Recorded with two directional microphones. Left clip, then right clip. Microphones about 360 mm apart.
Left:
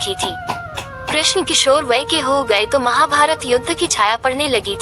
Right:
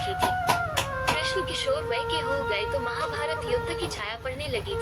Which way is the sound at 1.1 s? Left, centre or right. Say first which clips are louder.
Left 16 dB; left.